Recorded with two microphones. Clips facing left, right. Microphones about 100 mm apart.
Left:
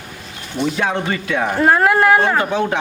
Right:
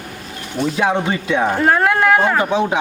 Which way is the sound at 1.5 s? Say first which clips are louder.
Left 4 dB; centre (ahead or behind).